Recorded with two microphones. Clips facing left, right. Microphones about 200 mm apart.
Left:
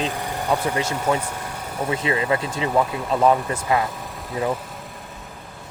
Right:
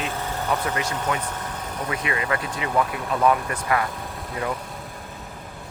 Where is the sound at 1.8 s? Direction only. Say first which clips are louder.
Left 5 dB; 25° left (ahead or behind).